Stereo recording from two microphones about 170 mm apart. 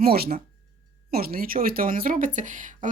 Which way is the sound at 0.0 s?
65° right (ahead or behind).